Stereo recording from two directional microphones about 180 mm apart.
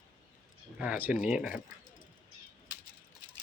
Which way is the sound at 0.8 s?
5° right (ahead or behind).